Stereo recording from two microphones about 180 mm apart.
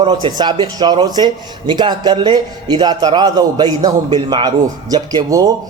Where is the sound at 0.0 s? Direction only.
30° right (ahead or behind).